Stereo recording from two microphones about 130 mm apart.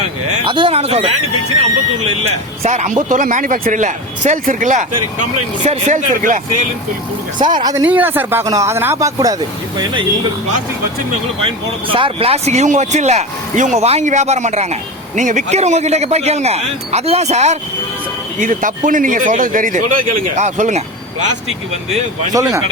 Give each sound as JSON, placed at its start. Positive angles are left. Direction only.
{"t": 0.4, "sound": "speech", "side_deg": -40}
{"t": 2.6, "sound": "speech", "side_deg": -65}
{"t": 7.6, "sound": "speech", "side_deg": -25}
{"t": 7.9, "sound": "speech", "side_deg": -15}
{"t": 11.4, "sound": "speech", "side_deg": -40}
{"t": 18.3, "sound": "speech", "side_deg": -90}
{"t": 22.3, "sound": "speech", "side_deg": -25}